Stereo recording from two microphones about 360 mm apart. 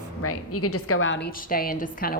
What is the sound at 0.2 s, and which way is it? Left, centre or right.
A woman's voice, left.